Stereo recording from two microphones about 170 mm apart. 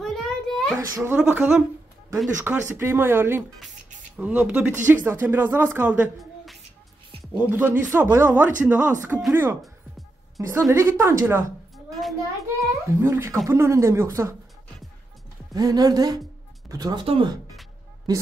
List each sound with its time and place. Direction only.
0.0 s a sound: centre (ahead or behind)
0.7 s speech: 15° right (ahead or behind); by 6.6 s centre (ahead or behind)
7.3 s speech: 10° right (ahead or behind)
9.6 s music: centre (ahead or behind)
10.7 s speech: 15° right (ahead or behind)
11.7 s a sound: centre (ahead or behind)
12.5 s speech: 15° right (ahead or behind)
15.5 s speech: 25° right (ahead or behind)